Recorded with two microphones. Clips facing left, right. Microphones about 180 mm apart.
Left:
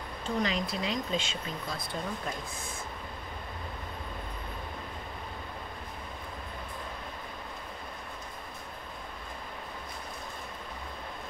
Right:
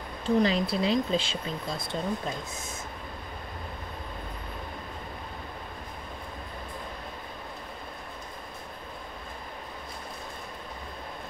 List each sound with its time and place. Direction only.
0.4 s speech: 30° right (ahead or behind)